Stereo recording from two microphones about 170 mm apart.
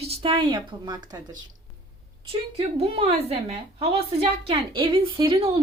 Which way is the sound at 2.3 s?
35° right (ahead or behind).